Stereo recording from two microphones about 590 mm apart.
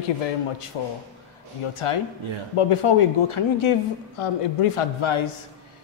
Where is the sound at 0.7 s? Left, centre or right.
Left.